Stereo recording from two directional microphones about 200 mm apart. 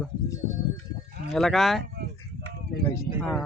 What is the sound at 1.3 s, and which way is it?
Speech, centre (ahead or behind).